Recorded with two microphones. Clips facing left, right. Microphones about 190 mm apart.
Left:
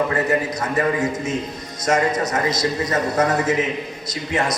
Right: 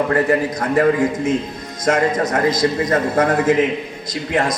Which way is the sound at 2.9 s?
55° right (ahead or behind).